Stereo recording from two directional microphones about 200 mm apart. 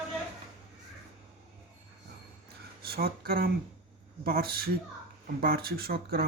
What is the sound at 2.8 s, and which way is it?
Speech, 50° right (ahead or behind).